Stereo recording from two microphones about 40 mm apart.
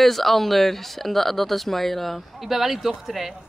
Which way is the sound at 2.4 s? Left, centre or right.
Centre.